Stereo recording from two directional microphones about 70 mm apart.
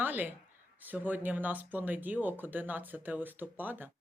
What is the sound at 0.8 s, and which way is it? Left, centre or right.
Speech, right.